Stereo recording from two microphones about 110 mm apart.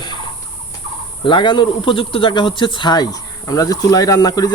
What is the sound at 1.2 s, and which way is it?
Speech, 45° left (ahead or behind).